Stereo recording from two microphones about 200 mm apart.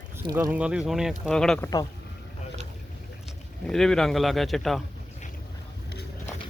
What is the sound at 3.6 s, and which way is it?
Speech, centre (ahead or behind).